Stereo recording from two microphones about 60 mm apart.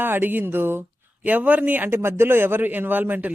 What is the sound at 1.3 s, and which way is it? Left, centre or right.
Speech, right.